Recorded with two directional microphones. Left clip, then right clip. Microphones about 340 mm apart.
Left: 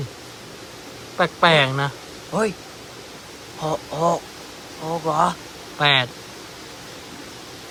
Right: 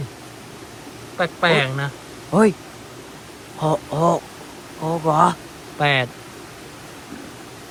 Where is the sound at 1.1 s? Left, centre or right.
Centre.